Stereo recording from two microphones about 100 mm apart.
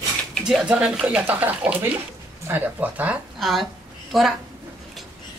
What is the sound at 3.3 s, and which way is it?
Speech, centre (ahead or behind).